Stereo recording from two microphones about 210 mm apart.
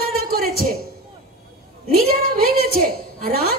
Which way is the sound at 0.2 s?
45° right (ahead or behind).